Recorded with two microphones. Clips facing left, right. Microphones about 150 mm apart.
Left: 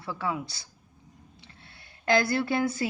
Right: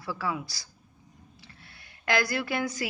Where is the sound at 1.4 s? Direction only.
25° left (ahead or behind).